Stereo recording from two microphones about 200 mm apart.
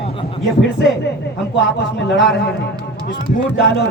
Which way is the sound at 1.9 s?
60° left (ahead or behind).